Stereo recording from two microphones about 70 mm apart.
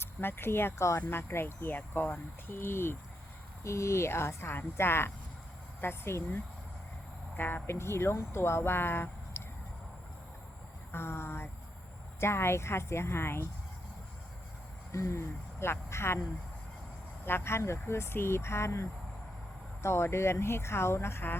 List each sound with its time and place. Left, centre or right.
0.0 s speech: left
10.9 s speech: left
14.9 s speech: left
17.2 s speech: left